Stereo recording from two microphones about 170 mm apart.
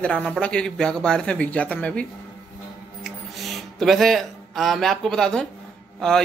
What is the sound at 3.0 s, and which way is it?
Music, centre (ahead or behind).